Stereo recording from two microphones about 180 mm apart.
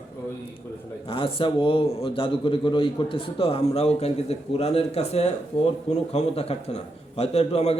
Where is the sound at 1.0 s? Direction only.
30° left (ahead or behind).